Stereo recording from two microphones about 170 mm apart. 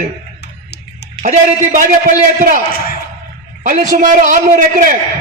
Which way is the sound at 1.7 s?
50° right (ahead or behind).